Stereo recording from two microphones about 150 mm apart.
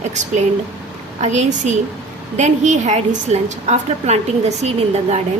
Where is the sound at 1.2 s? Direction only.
50° right (ahead or behind).